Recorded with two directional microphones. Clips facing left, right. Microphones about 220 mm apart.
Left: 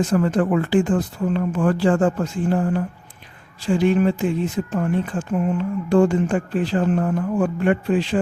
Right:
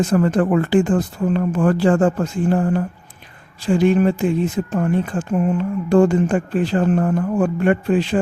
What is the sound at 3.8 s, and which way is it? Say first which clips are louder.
Speech: right 2 dB; 45° right (ahead or behind).